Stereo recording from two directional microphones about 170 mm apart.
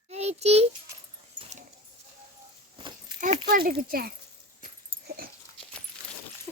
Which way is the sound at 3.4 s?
60° right (ahead or behind).